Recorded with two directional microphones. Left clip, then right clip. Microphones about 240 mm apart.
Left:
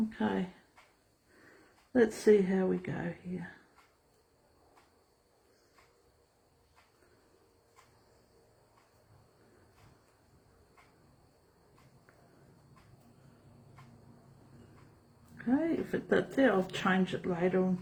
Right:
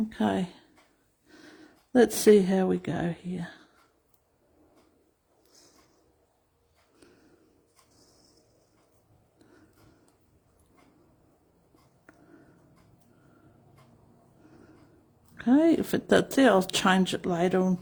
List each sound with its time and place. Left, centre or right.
0.1 s speech: right
1.9 s speech: right
15.4 s speech: right